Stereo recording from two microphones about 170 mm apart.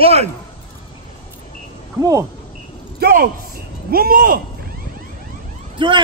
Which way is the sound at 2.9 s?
60° right (ahead or behind).